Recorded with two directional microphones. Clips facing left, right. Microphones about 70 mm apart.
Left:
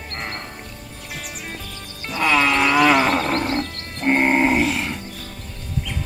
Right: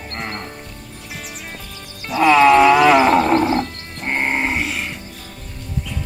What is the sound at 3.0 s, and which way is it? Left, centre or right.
Wild animals, centre.